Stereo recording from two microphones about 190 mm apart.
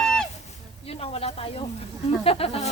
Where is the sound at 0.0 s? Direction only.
5° left (ahead or behind).